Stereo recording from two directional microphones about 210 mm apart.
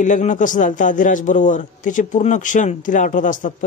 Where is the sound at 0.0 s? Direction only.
35° left (ahead or behind).